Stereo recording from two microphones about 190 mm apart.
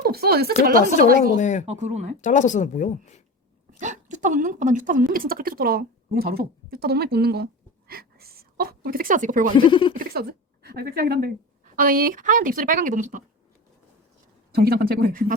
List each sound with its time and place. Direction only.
0.0 s a woman's voice: 55° right (ahead or behind)
1.4 s speech: 40° left (ahead or behind)
1.6 s speech: 35° right (ahead or behind)
2.2 s speech: 40° left (ahead or behind)
3.8 s speech: 40° right (ahead or behind)
9.6 s speech: 25° left (ahead or behind)
9.9 s a woman's voice: 50° right (ahead or behind)
14.5 s speech: 55° right (ahead or behind)